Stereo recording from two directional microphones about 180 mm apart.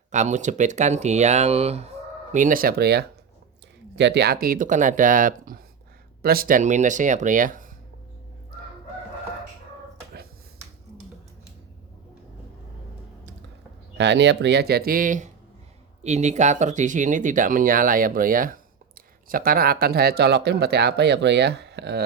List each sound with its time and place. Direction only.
0.1 s speech: 40° right (ahead or behind)
2.3 s speech: 50° right (ahead or behind)
3.9 s speech: 75° right (ahead or behind); by 7.7 s 50° right (ahead or behind)
14.0 s speech: 75° right (ahead or behind)